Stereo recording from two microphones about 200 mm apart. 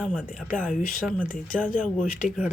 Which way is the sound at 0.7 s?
40° left (ahead or behind).